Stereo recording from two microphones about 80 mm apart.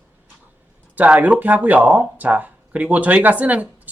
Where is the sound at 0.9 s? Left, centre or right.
Centre.